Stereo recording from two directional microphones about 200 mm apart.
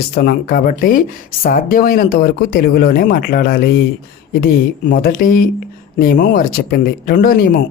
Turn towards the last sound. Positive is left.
turn(degrees=45)  # may be behind; listen again after turning